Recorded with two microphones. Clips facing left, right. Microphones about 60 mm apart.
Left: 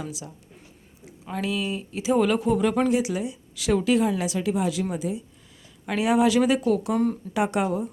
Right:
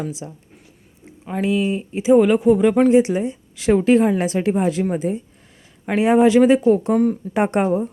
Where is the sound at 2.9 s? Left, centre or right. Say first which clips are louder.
Right 9 dB; right.